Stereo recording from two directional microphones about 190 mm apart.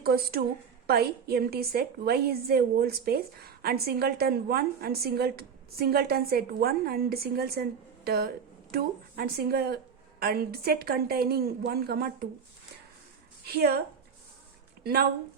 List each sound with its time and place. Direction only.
0.0 s a woman's voice: 55° right (ahead or behind)
13.4 s a woman's voice: 55° right (ahead or behind)
14.8 s a woman's voice: 55° right (ahead or behind)